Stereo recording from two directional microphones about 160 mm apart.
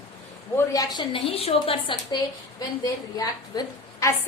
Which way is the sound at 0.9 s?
35° left (ahead or behind).